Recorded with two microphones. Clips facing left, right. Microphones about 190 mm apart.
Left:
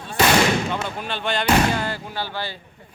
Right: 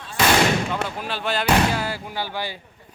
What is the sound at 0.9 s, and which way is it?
Speech, 5° right (ahead or behind).